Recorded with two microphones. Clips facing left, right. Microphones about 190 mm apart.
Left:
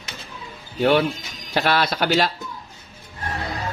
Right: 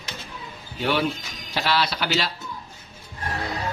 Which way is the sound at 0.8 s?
50° left (ahead or behind).